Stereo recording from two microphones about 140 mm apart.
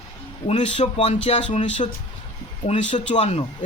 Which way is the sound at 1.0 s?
55° left (ahead or behind).